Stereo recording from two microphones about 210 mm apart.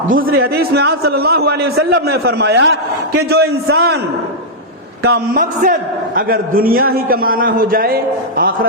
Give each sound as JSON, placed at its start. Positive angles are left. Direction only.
{"t": 0.1, "sound": "a man's voice", "side_deg": -45}
{"t": 5.0, "sound": "a man's voice", "side_deg": -40}